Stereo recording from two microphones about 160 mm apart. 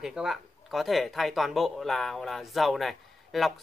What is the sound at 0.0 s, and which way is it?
Speech, 5° right (ahead or behind).